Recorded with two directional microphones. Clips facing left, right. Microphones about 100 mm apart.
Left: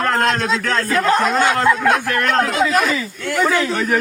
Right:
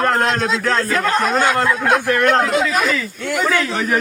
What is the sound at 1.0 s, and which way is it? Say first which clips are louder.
Speech: left 3 dB; 20° left (ahead or behind).